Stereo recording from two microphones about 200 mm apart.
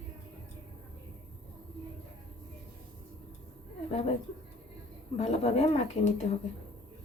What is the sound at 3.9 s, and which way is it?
Speech, 30° left (ahead or behind).